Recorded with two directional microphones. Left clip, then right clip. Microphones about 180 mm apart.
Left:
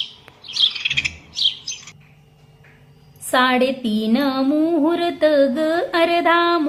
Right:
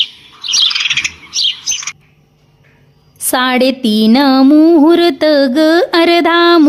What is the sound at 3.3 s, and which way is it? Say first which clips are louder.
Music: right 5 dB; 60° right (ahead or behind).